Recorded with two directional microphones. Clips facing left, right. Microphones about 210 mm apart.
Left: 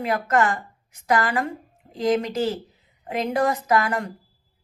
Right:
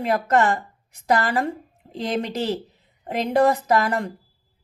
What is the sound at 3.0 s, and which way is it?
Speech, 35° right (ahead or behind).